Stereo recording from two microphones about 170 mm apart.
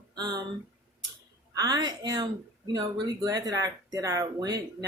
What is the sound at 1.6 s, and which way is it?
Speech, 20° right (ahead or behind).